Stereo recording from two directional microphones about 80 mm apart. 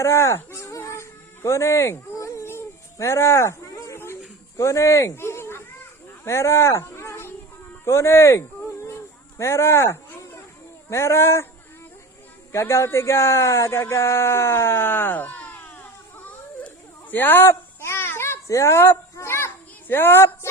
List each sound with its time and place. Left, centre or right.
0.0 s music: left
3.9 s a sound: left
4.5 s speech: left
6.2 s a sound: left
7.9 s speech: left
12.5 s speech: left
13.9 s a sound: left
17.5 s babbling: left
19.9 s a woman's voice: left